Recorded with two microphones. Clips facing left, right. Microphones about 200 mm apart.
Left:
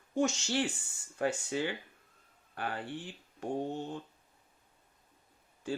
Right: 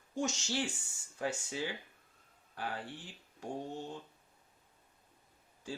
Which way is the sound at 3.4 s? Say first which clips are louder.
Left 6 dB; 60° left (ahead or behind).